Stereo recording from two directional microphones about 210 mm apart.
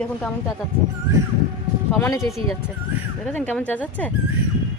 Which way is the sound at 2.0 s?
15° left (ahead or behind).